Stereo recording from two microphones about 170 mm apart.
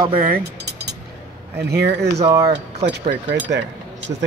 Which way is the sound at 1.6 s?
75° right (ahead or behind).